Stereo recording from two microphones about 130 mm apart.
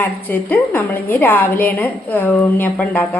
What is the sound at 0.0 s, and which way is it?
A woman's voice, 15° left (ahead or behind).